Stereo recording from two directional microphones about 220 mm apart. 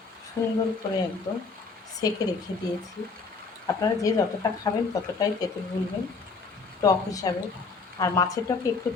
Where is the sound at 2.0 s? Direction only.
15° left (ahead or behind).